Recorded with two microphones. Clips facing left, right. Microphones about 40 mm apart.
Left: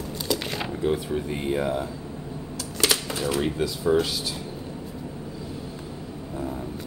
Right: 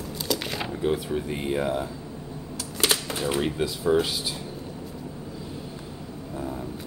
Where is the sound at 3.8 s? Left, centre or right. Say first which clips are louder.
Even; centre.